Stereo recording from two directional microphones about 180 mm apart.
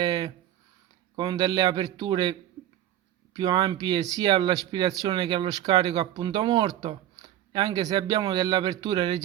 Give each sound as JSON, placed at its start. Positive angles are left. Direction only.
{"t": 0.0, "sound": "a sound", "side_deg": -20}
{"t": 1.1, "sound": "speech", "side_deg": -20}
{"t": 3.3, "sound": "speech", "side_deg": -20}